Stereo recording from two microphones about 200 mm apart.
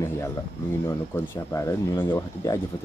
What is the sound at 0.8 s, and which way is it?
Speech, 15° left (ahead or behind).